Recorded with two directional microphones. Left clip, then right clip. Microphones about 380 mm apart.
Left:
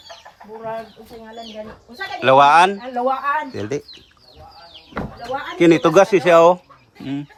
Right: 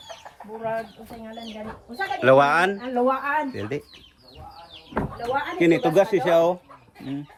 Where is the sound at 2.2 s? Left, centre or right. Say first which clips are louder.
Left 6 dB; centre.